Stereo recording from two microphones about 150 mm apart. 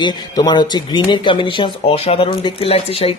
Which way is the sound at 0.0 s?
30° left (ahead or behind).